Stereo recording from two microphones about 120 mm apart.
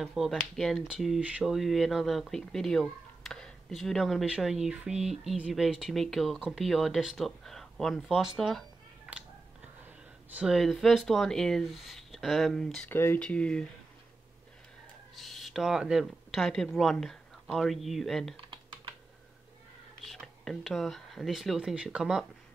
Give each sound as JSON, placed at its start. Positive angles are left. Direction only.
{"t": 0.0, "sound": "speech", "side_deg": 0}
{"t": 10.3, "sound": "speech", "side_deg": -5}
{"t": 12.9, "sound": "speech", "side_deg": 20}
{"t": 15.1, "sound": "speech", "side_deg": 0}
{"t": 20.1, "sound": "speech", "side_deg": 0}